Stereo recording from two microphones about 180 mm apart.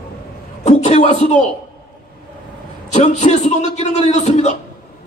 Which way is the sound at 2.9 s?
40° left (ahead or behind).